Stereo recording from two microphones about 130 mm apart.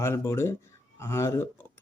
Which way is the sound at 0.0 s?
20° left (ahead or behind).